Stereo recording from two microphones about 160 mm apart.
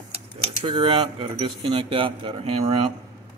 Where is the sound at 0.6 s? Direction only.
35° right (ahead or behind).